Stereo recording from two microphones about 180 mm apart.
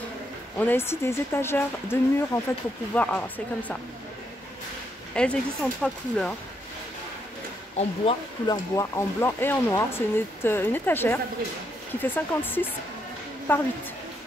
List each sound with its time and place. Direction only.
0.6 s speech: 10° left (ahead or behind)
5.1 s speech: 5° left (ahead or behind)
7.7 s speech: 30° left (ahead or behind)
8.7 s speech: 15° left (ahead or behind)